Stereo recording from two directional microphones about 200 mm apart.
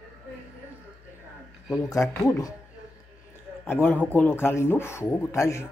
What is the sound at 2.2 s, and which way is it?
Speech, 15° left (ahead or behind).